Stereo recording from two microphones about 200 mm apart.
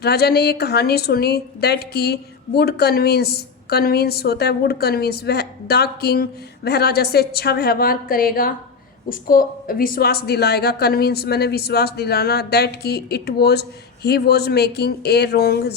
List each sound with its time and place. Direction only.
0.0 s a woman's voice: 55° left (ahead or behind)